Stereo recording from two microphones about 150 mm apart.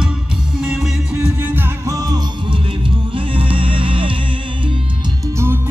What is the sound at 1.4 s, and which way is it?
Music, 15° right (ahead or behind).